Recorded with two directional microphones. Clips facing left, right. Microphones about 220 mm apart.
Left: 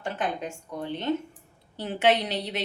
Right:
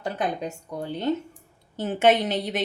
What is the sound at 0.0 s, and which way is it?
A woman's voice, 40° right (ahead or behind).